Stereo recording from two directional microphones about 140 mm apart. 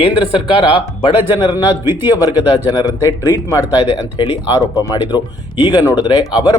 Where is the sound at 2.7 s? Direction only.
30° left (ahead or behind).